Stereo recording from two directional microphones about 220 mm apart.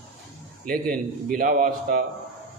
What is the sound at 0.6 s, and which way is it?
A man's voice, 40° right (ahead or behind).